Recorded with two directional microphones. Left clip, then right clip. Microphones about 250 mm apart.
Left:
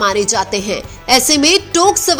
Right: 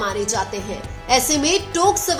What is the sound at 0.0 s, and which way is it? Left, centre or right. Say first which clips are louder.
A woman's voice: left 8 dB; left.